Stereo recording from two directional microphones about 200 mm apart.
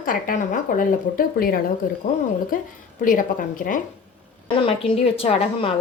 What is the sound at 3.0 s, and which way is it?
Speech, 40° left (ahead or behind).